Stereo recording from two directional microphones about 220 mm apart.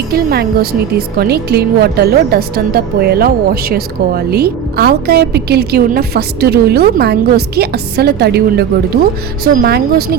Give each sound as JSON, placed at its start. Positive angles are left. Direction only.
{"t": 0.1, "sound": "a woman's voice", "side_deg": -45}